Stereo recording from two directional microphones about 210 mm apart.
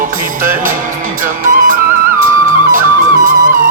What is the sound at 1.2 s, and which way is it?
Music, 40° right (ahead or behind).